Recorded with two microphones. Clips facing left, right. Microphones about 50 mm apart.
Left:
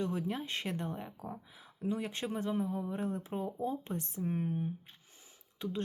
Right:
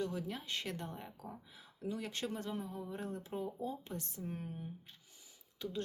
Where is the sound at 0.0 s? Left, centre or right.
Left.